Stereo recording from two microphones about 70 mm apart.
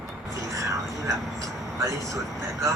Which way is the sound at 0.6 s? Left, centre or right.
Right.